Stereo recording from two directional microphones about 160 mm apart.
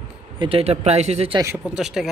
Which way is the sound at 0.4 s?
35° right (ahead or behind).